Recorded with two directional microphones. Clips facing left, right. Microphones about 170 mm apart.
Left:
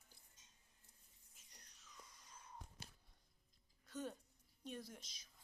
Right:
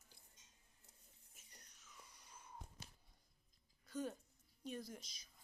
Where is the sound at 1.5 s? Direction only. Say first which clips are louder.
Even; centre (ahead or behind).